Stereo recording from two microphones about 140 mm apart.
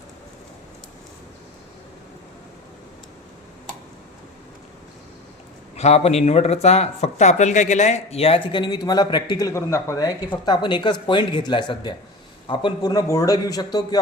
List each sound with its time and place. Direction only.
5.7 s speech: 50° left (ahead or behind); by 10.2 s 25° left (ahead or behind)
10.4 s a man's voice: 35° left (ahead or behind)